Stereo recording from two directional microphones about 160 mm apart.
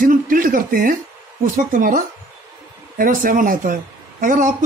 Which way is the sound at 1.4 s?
55° right (ahead or behind).